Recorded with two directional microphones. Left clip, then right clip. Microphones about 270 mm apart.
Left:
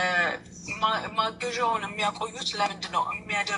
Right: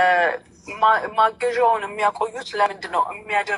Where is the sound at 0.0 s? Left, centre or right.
Right.